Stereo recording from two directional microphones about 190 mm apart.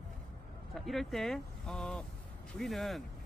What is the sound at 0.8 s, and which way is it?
Speech, centre (ahead or behind).